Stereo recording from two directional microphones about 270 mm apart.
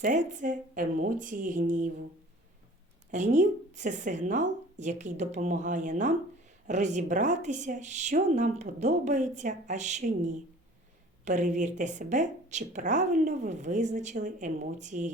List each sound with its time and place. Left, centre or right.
0.0 s a woman's voice: right
3.1 s a woman's voice: right